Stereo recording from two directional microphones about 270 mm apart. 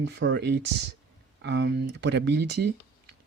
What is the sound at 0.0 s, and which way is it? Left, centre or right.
Speech, right.